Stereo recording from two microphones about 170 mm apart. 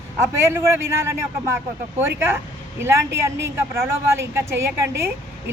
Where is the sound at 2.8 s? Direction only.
15° right (ahead or behind).